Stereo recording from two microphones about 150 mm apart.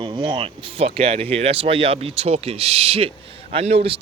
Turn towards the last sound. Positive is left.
turn(degrees=-40)  # may be behind; listen again after turning